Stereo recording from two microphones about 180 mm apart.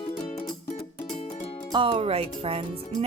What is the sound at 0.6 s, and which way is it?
Music, 40° left (ahead or behind).